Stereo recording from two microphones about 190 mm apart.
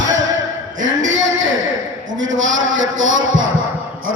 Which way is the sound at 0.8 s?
85° right.